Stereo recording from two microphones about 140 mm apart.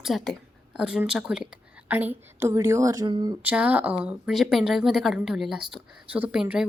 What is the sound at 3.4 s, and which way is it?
Speech, 10° right (ahead or behind).